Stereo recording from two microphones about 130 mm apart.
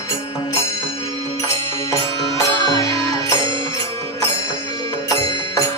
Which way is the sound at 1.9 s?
25° left (ahead or behind).